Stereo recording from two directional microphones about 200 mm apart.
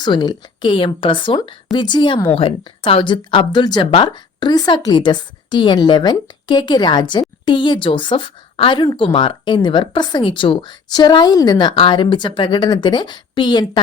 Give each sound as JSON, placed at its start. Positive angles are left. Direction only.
{"t": 0.0, "sound": "a woman's voice", "side_deg": 20}